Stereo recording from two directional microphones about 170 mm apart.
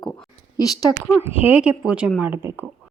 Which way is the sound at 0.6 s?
20° left (ahead or behind).